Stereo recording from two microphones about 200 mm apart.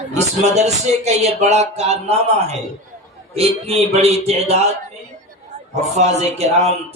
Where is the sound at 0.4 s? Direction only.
35° right (ahead or behind).